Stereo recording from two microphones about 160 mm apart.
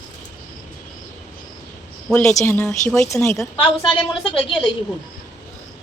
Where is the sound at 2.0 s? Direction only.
5° left (ahead or behind).